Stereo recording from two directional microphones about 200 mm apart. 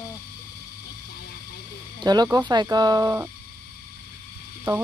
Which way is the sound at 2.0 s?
20° right (ahead or behind).